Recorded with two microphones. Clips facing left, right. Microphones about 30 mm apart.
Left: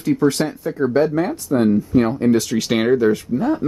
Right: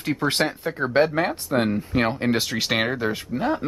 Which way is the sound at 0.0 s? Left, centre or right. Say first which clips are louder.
Left 5 dB; right.